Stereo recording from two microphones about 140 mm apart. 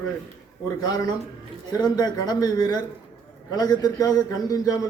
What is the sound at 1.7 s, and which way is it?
A man's voice, 30° left (ahead or behind).